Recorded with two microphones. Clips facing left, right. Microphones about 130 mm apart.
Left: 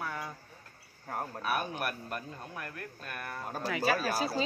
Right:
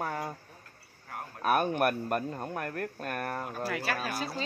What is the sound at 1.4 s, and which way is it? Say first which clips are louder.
Speech: right 9 dB; 50° right (ahead or behind).